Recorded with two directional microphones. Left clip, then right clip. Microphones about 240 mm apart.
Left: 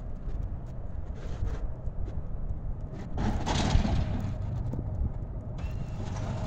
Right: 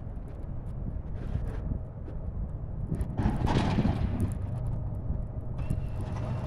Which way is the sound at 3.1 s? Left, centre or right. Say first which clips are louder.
Even; left.